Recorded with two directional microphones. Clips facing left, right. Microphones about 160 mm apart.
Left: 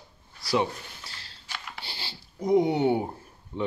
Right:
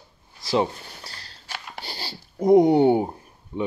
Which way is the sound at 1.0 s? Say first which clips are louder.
Right 3 dB; 40° right (ahead or behind).